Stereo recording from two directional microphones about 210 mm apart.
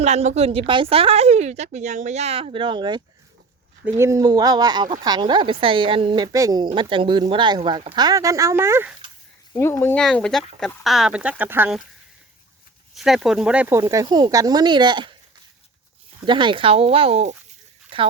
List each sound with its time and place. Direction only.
0.0 s speech: 35° right (ahead or behind); by 9.0 s 10° right (ahead or behind)
9.6 s speech: 10° left (ahead or behind); by 11.8 s 10° right (ahead or behind)
12.9 s speech: centre (ahead or behind); by 15.1 s 20° right (ahead or behind)
16.2 s speech: 20° right (ahead or behind)
17.9 s a sound: 25° right (ahead or behind)